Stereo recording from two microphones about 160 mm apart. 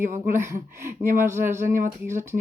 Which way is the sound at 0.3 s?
15° right (ahead or behind).